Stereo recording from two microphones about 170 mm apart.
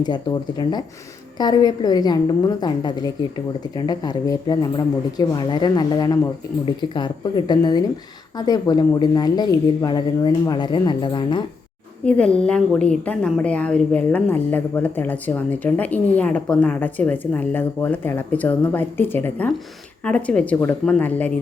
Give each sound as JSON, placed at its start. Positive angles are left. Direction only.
{"t": 0.0, "sound": "speech", "side_deg": 25}
{"t": 12.0, "sound": "a woman's voice", "side_deg": 5}